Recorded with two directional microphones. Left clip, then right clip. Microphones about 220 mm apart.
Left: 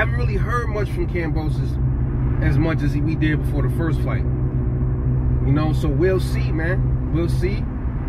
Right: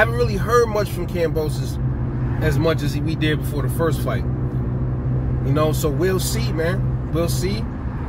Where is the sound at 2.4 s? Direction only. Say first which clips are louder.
Right 3 dB; 10° right (ahead or behind).